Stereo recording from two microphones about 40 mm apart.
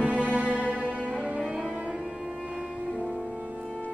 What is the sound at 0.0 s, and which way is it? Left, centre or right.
Music, right.